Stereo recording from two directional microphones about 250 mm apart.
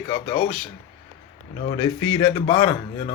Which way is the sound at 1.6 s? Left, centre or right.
Centre.